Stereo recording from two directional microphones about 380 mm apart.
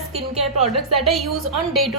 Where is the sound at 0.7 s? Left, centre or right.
Centre.